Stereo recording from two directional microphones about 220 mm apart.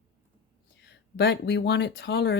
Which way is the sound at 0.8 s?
50° left (ahead or behind).